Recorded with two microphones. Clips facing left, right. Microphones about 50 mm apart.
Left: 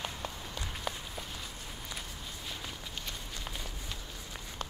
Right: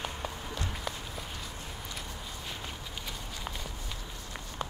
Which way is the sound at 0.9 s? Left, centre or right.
Centre.